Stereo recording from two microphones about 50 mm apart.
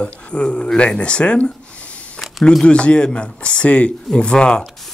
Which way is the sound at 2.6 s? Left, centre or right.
Left.